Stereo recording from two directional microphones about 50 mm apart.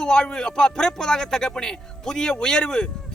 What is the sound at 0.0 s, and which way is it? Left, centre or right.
A man's voice, centre.